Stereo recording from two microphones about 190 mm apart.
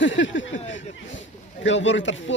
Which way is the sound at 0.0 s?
80° left.